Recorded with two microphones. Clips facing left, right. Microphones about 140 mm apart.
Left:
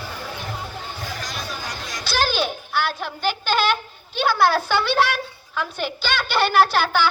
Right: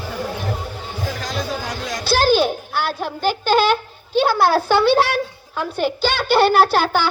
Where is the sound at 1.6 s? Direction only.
60° right (ahead or behind); by 3.6 s 40° right (ahead or behind).